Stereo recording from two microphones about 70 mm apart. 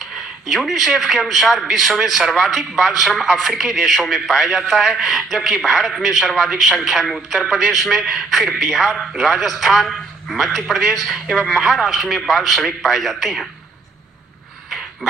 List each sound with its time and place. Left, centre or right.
0.0 s a man's voice: centre